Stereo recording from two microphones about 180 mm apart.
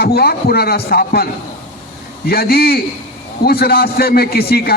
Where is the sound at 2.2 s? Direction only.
60° left (ahead or behind).